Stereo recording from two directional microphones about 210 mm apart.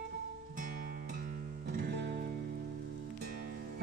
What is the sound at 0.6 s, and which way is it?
Music, 40° right (ahead or behind).